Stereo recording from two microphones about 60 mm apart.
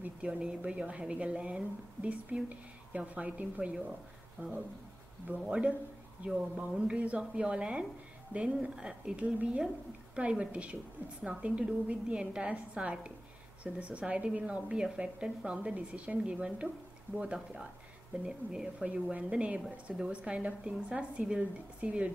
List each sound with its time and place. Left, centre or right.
0.2 s a woman's voice: centre